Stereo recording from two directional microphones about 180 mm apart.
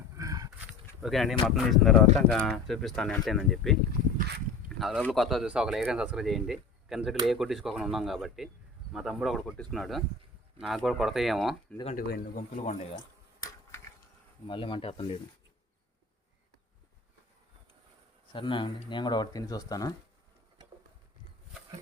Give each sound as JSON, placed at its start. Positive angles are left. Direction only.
{"t": 0.2, "sound": "a sound", "side_deg": -20}
{"t": 0.7, "sound": "speech", "side_deg": 0}
{"t": 4.8, "sound": "speech", "side_deg": 0}
{"t": 11.9, "sound": "a man's voice", "side_deg": 55}
{"t": 13.4, "sound": "a sound", "side_deg": 15}
{"t": 14.4, "sound": "speech", "side_deg": 30}
{"t": 18.3, "sound": "speech", "side_deg": 25}